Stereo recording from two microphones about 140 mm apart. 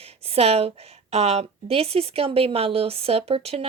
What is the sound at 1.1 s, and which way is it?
A woman's voice, 50° right (ahead or behind).